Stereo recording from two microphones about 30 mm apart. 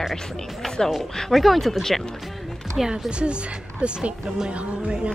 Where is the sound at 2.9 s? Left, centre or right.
Right.